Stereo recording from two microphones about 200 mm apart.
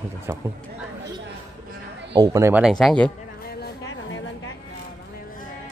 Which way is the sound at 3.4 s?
60° left (ahead or behind).